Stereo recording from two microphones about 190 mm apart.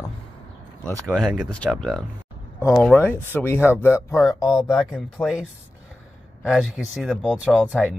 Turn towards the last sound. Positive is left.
turn(degrees=-5)  # may be behind; listen again after turning